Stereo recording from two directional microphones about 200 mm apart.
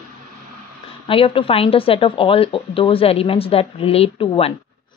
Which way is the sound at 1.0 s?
25° left (ahead or behind).